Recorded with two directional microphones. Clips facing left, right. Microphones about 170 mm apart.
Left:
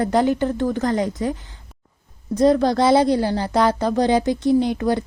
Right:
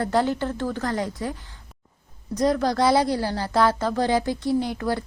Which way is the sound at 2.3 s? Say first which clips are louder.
Left 5 dB; 25° left (ahead or behind).